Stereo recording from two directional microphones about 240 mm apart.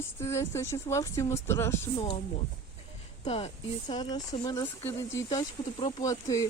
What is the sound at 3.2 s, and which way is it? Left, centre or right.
A woman's voice, left.